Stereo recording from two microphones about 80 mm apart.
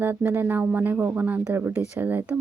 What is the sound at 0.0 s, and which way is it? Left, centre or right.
A woman's voice, right.